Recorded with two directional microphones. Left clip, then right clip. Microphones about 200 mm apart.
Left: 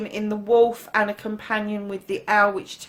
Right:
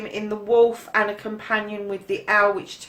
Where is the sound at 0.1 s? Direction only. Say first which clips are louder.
Left 1 dB; 45° left (ahead or behind).